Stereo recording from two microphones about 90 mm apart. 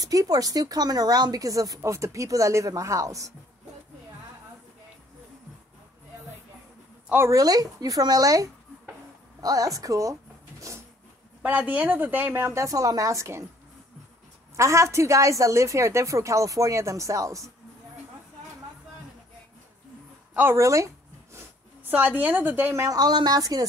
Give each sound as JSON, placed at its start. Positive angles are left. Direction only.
{"t": 0.0, "sound": "a woman's voice", "side_deg": -40}
{"t": 7.2, "sound": "a woman's voice", "side_deg": -40}
{"t": 11.7, "sound": "a woman's voice", "side_deg": -20}
{"t": 14.6, "sound": "a woman's voice", "side_deg": -35}
{"t": 20.5, "sound": "a sound", "side_deg": -35}
{"t": 22.8, "sound": "a woman's voice", "side_deg": -45}